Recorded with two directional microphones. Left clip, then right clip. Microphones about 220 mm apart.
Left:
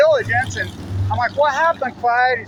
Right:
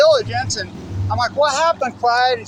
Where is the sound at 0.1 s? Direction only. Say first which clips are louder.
Even; 15° right (ahead or behind).